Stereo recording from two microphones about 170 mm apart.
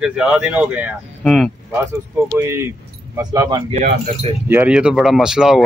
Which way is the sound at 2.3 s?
15° right (ahead or behind).